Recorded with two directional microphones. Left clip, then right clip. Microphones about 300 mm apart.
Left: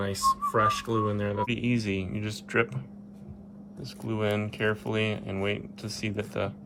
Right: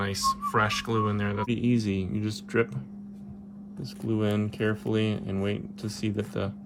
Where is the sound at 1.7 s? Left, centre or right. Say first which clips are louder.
Right 1 dB; right.